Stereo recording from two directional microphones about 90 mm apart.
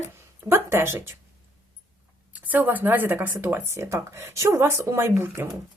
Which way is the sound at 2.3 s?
20° right (ahead or behind).